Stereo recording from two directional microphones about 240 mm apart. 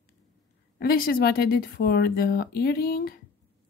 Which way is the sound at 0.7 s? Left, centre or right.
Left.